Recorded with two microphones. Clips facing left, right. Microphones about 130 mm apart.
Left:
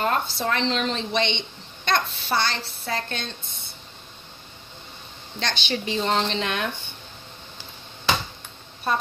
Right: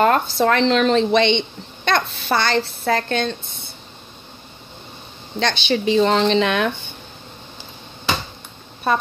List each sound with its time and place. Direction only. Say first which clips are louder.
0.0 s a woman's voice: right 8 dB; 75° right (ahead or behind)
5.4 s speech: right 8 dB; 85° right